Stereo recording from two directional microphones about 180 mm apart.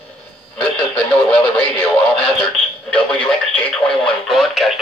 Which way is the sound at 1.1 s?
5° left (ahead or behind).